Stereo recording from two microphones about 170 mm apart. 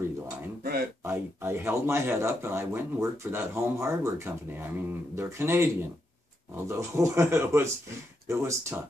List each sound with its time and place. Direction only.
1.0 s speech: 15° right (ahead or behind)